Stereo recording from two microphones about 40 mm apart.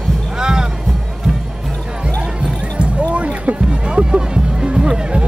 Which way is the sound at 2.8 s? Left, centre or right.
Right.